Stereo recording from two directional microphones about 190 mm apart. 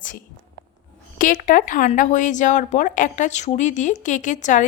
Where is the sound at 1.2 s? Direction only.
45° left (ahead or behind).